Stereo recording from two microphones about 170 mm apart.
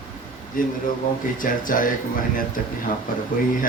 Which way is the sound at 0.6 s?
55° left (ahead or behind).